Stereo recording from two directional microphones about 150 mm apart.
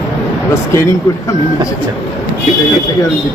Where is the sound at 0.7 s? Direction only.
20° left (ahead or behind).